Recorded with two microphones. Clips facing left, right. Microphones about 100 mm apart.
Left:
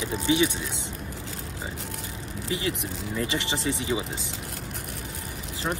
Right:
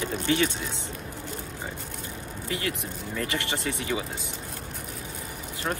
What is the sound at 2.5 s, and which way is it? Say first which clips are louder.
Speech: left 2 dB; 20° left (ahead or behind).